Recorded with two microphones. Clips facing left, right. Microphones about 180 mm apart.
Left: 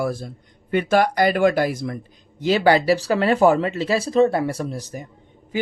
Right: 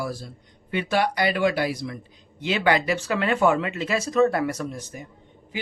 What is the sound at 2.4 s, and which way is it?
Speech, 40° left (ahead or behind).